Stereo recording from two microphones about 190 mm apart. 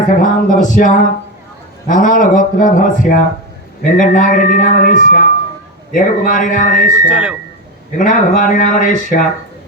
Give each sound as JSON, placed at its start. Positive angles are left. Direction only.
{"t": 0.2, "sound": "speech", "side_deg": 45}
{"t": 7.1, "sound": "speech", "side_deg": -5}
{"t": 7.9, "sound": "speech", "side_deg": 45}